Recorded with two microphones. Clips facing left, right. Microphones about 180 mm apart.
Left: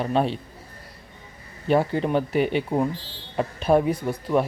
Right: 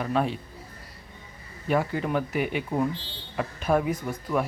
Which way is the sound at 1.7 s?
30° left (ahead or behind).